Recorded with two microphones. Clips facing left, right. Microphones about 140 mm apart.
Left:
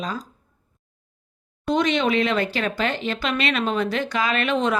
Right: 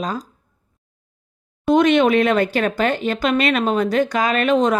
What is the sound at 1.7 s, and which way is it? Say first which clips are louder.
Speech: right 7 dB; 50° right (ahead or behind).